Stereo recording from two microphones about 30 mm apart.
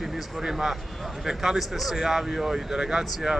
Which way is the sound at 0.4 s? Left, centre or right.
Centre.